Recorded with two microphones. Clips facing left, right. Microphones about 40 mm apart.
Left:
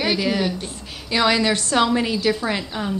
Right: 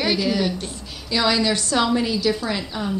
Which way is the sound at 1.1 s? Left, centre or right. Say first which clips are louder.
Left 2 dB; left.